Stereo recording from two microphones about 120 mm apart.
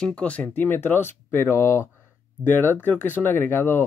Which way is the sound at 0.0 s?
10° left (ahead or behind).